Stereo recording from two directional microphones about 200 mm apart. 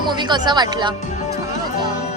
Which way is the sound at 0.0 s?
20° right (ahead or behind).